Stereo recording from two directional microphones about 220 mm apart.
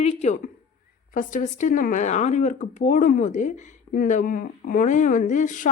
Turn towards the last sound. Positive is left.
turn(degrees=35)  # may be behind; listen again after turning